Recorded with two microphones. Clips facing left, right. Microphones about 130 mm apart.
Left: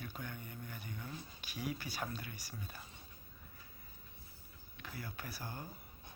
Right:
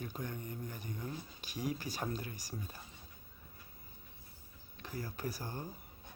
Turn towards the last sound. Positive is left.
turn(degrees=-35)  # may be behind; listen again after turning